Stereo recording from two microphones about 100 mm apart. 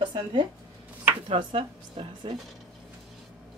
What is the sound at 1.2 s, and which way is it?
Speech, 75° right (ahead or behind).